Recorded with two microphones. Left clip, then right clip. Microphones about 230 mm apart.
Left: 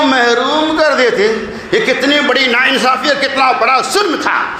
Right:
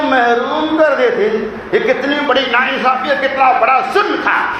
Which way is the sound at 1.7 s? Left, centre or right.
Left.